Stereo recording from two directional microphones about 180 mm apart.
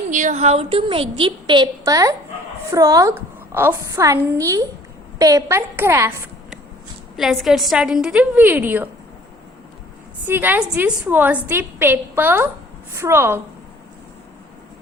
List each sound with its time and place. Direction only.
0.1 s a woman's voice: 45° right (ahead or behind); by 6.2 s 15° right (ahead or behind)
7.2 s a woman's voice: centre (ahead or behind)
10.2 s a woman's voice: 10° right (ahead or behind)